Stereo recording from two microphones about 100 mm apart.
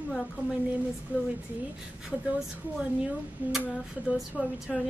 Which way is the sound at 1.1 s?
15° right (ahead or behind).